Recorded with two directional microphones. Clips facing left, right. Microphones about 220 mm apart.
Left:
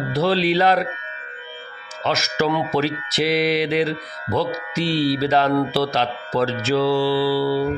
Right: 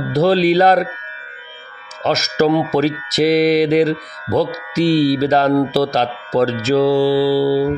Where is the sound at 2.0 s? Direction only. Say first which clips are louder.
Right 6 dB; 40° right (ahead or behind).